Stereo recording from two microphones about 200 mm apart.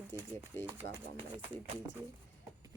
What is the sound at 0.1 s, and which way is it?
Speech, 15° left (ahead or behind).